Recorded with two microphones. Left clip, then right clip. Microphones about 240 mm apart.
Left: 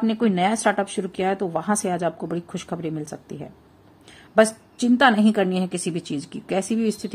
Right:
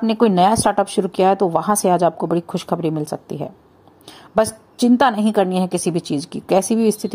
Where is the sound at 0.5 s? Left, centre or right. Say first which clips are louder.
Right 5 dB; centre.